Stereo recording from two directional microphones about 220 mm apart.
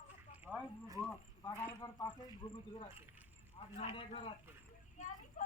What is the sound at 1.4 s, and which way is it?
Speech, 15° left (ahead or behind).